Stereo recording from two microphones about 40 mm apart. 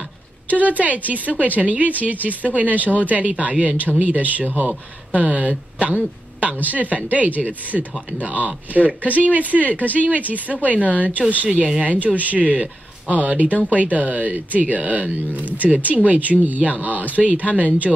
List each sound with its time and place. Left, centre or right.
0.5 s speech: right
11.4 s speech: right
11.8 s speech: right